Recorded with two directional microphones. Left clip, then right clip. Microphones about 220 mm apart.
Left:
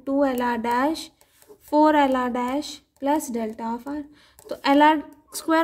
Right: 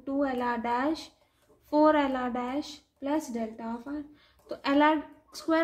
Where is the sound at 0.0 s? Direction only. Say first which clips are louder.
Left 7 dB; 45° left (ahead or behind).